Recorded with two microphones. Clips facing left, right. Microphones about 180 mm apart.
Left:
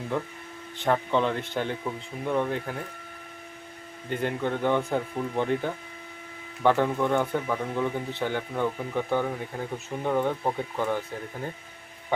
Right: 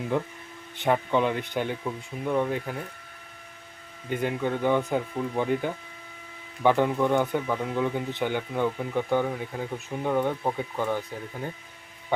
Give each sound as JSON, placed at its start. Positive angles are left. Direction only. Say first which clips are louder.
{"t": 0.8, "sound": "speech", "louder": "right 1 dB", "side_deg": -10}
{"t": 4.1, "sound": "speech", "louder": "right 1 dB", "side_deg": -10}